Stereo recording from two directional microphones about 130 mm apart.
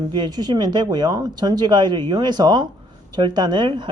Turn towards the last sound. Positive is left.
turn(degrees=-40)  # may be behind; listen again after turning